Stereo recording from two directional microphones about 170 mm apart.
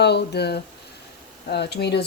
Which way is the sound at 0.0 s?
75° left (ahead or behind).